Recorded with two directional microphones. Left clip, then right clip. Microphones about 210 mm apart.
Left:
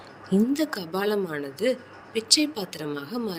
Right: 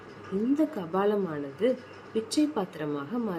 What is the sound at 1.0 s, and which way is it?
Speech, 50° left (ahead or behind).